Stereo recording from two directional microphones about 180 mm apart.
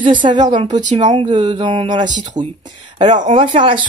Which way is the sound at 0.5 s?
25° right (ahead or behind).